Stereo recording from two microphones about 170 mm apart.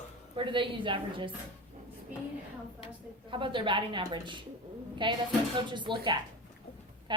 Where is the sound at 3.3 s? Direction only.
30° right (ahead or behind).